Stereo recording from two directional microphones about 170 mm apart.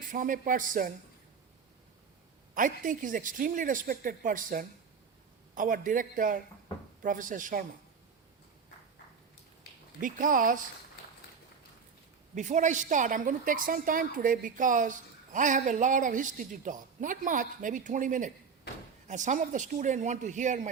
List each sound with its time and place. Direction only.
0.1 s a woman's voice: 55° right (ahead or behind)
2.6 s a woman's voice: 50° right (ahead or behind)
9.7 s a sound: 75° left (ahead or behind)
10.0 s a woman's voice: 55° right (ahead or behind)
12.3 s a woman's voice: 45° right (ahead or behind)